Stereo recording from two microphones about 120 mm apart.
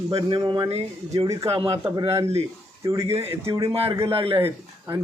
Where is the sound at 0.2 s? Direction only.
35° right (ahead or behind).